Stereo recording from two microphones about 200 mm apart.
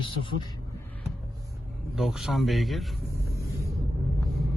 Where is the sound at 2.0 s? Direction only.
Centre (ahead or behind).